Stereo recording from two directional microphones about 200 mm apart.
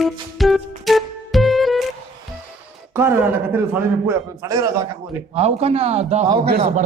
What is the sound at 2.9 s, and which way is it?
A man's voice, 10° right (ahead or behind).